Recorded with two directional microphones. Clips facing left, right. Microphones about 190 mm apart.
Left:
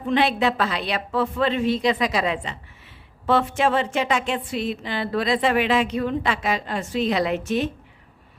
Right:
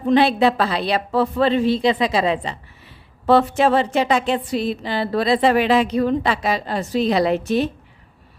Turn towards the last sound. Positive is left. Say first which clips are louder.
# right 4 dB
turn(degrees=-35)  # may be behind; listen again after turning